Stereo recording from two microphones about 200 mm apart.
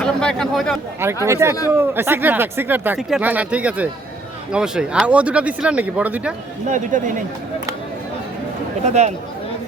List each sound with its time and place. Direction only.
0.0 s speech: 5° left (ahead or behind)
1.0 s speech: 15° right (ahead or behind)
6.7 s speech: 40° right (ahead or behind)
8.9 s speech: 35° right (ahead or behind)